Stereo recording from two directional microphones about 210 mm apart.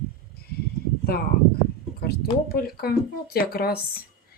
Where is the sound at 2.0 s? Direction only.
45° left (ahead or behind).